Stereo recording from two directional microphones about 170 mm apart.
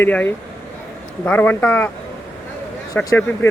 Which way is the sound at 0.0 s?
10° left (ahead or behind).